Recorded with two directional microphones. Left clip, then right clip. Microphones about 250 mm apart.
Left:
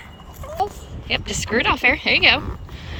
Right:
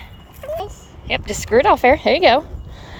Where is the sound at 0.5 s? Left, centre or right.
Centre.